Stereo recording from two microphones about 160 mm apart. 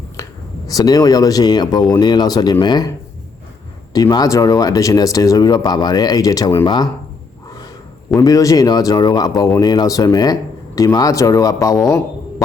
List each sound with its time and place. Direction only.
0.2 s a sound: 20° left (ahead or behind)
0.7 s speech: 25° left (ahead or behind)
3.9 s speech: 25° left (ahead or behind)
8.2 s speech: 20° left (ahead or behind)